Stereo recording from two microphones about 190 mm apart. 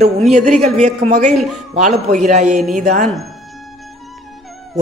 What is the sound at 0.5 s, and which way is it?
Speech, 35° right (ahead or behind).